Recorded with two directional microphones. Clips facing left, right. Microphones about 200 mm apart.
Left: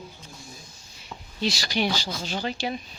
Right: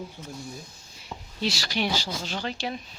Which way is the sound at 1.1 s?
5° right (ahead or behind).